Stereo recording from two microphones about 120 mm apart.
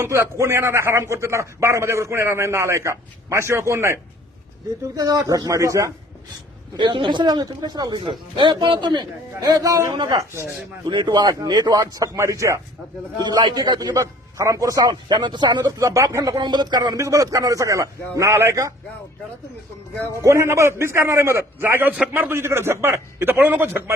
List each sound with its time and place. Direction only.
0.0 s a man's voice: 25° right (ahead or behind)
6.7 s a man's voice: 40° right (ahead or behind); by 12.5 s 25° right (ahead or behind)
13.2 s a man's voice: 35° right (ahead or behind)
20.2 s a man's voice: 25° right (ahead or behind)